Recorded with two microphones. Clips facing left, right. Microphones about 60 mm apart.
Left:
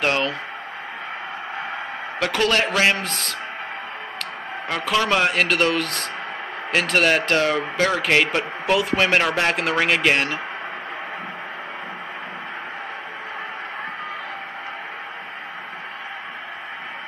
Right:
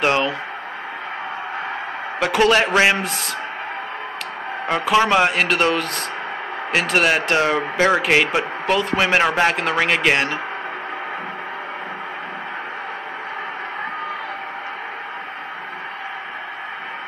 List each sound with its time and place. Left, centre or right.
0.0 s radio: centre
2.1 s speech: centre
4.9 s speech: centre
7.4 s speech: centre
8.0 s a man's voice: centre